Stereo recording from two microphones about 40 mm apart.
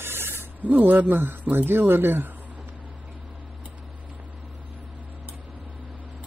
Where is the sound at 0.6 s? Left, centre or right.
Right.